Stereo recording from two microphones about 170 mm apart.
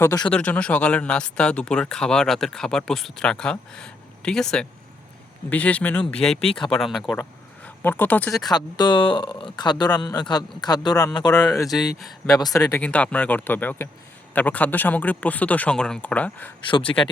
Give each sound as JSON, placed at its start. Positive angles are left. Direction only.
{"t": 0.0, "sound": "speech", "side_deg": 20}
{"t": 0.3, "sound": "speech", "side_deg": 5}
{"t": 8.3, "sound": "speech", "side_deg": 25}
{"t": 12.8, "sound": "speech", "side_deg": 5}
{"t": 16.6, "sound": "speech", "side_deg": 30}